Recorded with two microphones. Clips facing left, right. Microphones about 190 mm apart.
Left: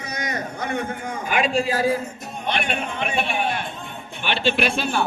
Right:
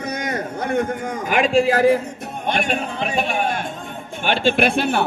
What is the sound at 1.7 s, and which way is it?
Speech, 70° right (ahead or behind).